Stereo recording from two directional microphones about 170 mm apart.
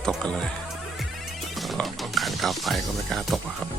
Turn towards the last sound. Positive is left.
turn(degrees=0)  # may be behind; listen again after turning